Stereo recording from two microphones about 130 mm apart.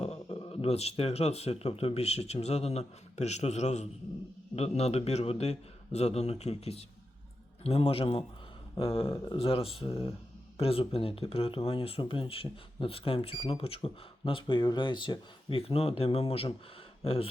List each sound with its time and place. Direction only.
0.0 s a man's voice: 50° left (ahead or behind)